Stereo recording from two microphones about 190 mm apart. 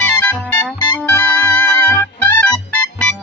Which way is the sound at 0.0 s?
10° left (ahead or behind).